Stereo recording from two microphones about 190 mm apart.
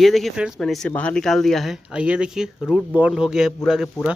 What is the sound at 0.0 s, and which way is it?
Speech, centre (ahead or behind).